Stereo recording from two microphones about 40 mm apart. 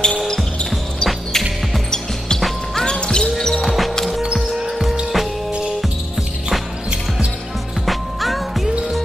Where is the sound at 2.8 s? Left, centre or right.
Centre.